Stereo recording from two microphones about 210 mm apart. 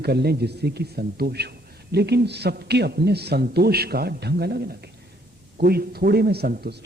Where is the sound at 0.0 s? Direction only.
50° right (ahead or behind).